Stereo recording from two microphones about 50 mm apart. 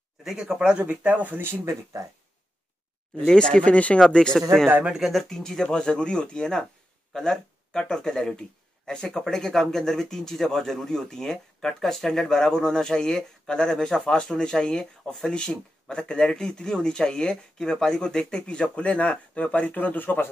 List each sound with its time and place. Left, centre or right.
0.2 s speech: centre
0.8 s speech: right
1.4 s speech: right
3.3 s speech: centre
4.0 s speech: centre
4.9 s speech: centre
5.3 s speech: centre; by 20.2 s left